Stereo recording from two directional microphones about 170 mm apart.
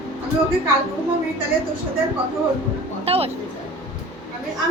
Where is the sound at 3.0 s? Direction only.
35° right (ahead or behind).